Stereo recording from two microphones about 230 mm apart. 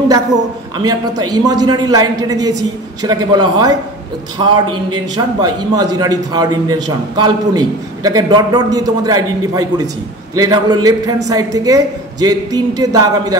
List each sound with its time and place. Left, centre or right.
0.8 s a man's voice: centre